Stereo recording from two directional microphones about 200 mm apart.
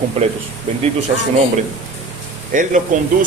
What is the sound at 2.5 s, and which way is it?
Speech, 40° right (ahead or behind).